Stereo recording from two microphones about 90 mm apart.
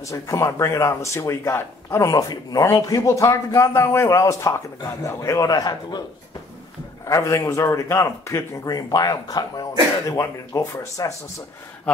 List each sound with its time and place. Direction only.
0.0 s a man's voice: 35° left (ahead or behind)
7.1 s a man's voice: 35° left (ahead or behind)
8.6 s a man's voice: 45° left (ahead or behind)